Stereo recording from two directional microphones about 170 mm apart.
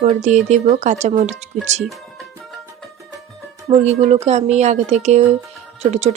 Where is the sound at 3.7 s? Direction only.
40° right (ahead or behind).